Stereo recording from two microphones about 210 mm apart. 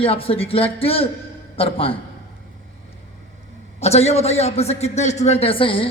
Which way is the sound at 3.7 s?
30° left (ahead or behind).